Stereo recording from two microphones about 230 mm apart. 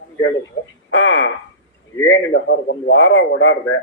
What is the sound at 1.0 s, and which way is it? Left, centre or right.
A man's voice, left.